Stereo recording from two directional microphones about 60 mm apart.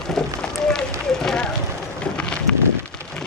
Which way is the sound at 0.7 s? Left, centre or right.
Centre.